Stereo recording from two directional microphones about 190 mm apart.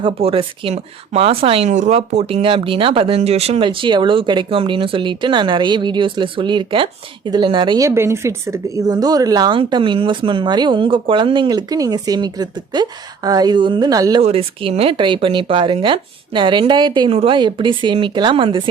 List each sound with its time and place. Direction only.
0.0 s speech: 30° right (ahead or behind)
14.2 s speech: 30° right (ahead or behind)